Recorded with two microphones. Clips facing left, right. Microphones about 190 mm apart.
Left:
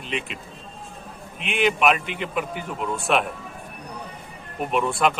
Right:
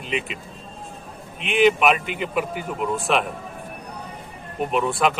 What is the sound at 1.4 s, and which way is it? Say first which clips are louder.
Speech: right 3 dB; centre (ahead or behind).